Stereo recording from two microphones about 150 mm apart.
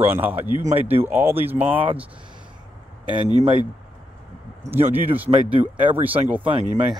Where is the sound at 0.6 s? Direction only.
55° right (ahead or behind).